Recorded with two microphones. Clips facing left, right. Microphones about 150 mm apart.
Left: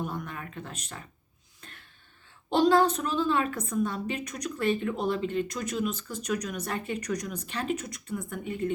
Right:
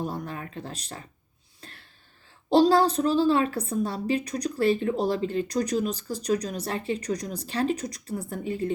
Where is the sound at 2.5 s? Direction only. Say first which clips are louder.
Right 3 dB; 35° right (ahead or behind).